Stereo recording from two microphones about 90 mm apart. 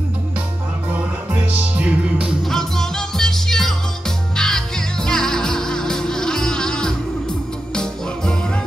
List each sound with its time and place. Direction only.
0.9 s music: 15° right (ahead or behind)
2.4 s music: 5° left (ahead or behind)